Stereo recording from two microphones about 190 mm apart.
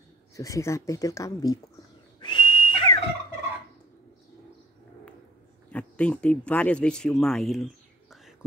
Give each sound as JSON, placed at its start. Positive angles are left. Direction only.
{"t": 0.4, "sound": "speech", "side_deg": 15}
{"t": 2.1, "sound": "whistle", "side_deg": 25}
{"t": 5.7, "sound": "speech", "side_deg": 5}